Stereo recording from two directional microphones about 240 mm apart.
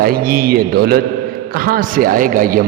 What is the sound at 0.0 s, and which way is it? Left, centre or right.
A man's voice, right.